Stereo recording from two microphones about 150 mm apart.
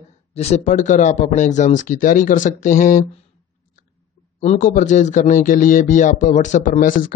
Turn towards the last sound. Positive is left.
turn(degrees=65)  # may be behind; listen again after turning